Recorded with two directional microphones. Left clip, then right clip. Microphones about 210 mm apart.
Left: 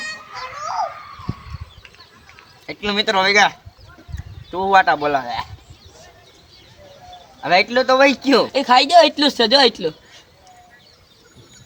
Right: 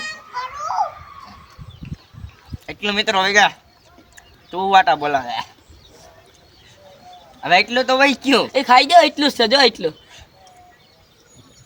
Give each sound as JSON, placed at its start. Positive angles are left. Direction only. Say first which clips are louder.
{"t": 0.0, "sound": "music", "louder": "right 2 dB", "side_deg": -25}
{"t": 2.6, "sound": "speech", "louder": "even", "side_deg": -15}
{"t": 7.4, "sound": "speech", "louder": "even", "side_deg": -20}
{"t": 8.5, "sound": "speech", "louder": "right 1 dB", "side_deg": 10}